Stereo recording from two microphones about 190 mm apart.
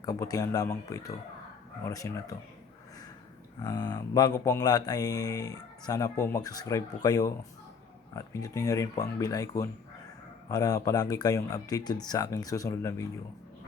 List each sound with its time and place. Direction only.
0.0 s speech: 20° left (ahead or behind)
3.6 s speech: 20° left (ahead or behind)